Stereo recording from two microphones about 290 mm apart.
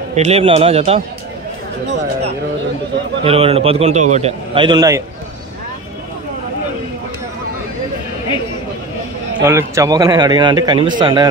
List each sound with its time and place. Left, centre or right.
0.1 s a man's voice: right
3.3 s a man's voice: centre
9.4 s a man's voice: centre